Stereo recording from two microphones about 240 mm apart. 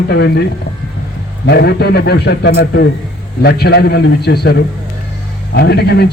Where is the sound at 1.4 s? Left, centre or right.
Left.